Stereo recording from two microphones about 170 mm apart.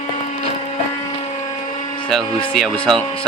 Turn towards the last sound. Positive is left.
turn(degrees=5)  # may be behind; listen again after turning